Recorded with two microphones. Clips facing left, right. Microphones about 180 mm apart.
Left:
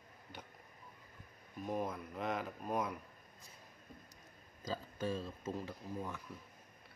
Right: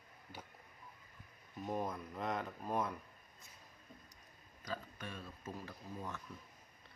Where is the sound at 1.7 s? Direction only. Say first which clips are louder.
Left 1 dB; 5° left (ahead or behind).